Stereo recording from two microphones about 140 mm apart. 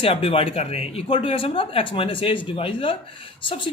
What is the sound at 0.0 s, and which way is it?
Speech, 40° left (ahead or behind).